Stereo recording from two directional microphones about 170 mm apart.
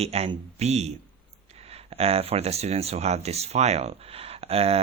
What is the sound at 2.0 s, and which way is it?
Speech, 35° right (ahead or behind).